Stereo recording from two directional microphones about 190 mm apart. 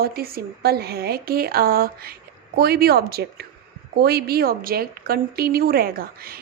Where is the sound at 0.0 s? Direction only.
55° right (ahead or behind).